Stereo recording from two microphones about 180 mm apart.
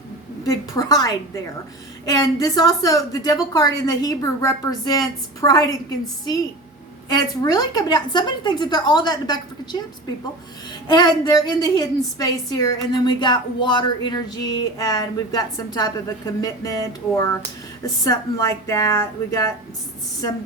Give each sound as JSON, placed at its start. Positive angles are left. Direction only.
{"t": 0.4, "sound": "a woman's voice", "side_deg": 20}
{"t": 7.1, "sound": "a woman's voice", "side_deg": 20}
{"t": 10.8, "sound": "a woman's voice", "side_deg": 25}